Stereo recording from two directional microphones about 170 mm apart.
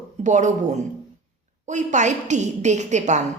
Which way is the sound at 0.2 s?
45° right (ahead or behind).